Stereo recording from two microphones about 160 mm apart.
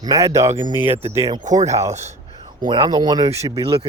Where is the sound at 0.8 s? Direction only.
35° right (ahead or behind).